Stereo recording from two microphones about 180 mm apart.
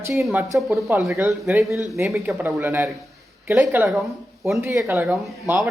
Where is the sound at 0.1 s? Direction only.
Centre (ahead or behind).